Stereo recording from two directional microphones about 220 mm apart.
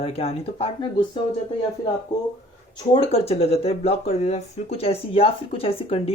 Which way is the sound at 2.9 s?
25° left (ahead or behind).